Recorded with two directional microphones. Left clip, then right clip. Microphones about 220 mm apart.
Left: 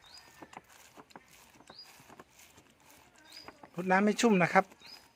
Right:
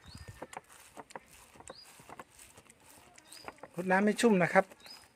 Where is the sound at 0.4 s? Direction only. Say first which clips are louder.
Right 6 dB; 45° right (ahead or behind).